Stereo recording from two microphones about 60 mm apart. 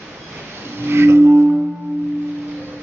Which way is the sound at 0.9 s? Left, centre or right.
Right.